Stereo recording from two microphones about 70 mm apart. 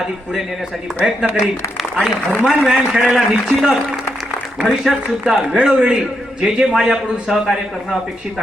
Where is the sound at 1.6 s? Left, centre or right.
Left.